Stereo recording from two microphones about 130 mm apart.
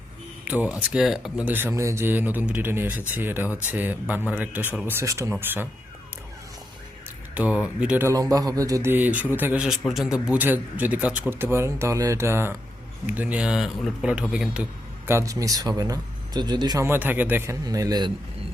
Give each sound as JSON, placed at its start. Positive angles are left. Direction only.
{"t": 0.4, "sound": "a man's voice", "side_deg": -10}
{"t": 7.3, "sound": "a man's voice", "side_deg": -10}
{"t": 8.0, "sound": "a man's voice", "side_deg": -25}
{"t": 16.8, "sound": "a man's voice", "side_deg": -15}